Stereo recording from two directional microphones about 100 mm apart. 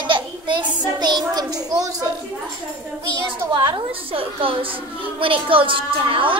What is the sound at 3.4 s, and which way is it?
A child's voice, 50° right (ahead or behind).